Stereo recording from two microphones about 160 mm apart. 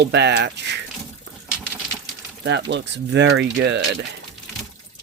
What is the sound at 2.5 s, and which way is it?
Speech, 90° right.